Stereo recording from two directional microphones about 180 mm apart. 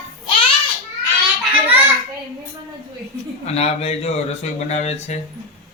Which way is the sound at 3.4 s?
35° left (ahead or behind).